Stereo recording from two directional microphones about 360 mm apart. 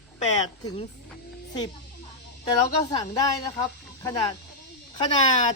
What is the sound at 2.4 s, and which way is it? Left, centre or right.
Speech, centre.